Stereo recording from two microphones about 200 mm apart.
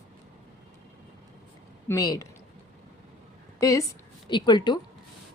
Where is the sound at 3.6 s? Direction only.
15° left (ahead or behind).